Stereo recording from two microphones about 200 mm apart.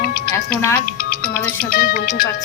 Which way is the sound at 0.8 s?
45° left (ahead or behind).